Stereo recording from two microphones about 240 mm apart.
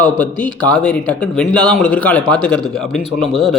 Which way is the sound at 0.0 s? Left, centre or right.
Centre.